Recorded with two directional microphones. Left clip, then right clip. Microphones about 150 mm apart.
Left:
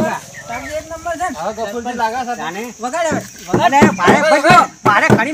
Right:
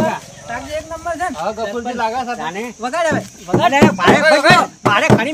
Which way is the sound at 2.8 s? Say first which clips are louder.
Right 1 dB; 20° right (ahead or behind).